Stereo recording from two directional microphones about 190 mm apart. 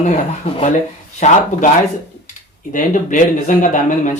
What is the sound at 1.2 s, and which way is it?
Speech, 40° left (ahead or behind).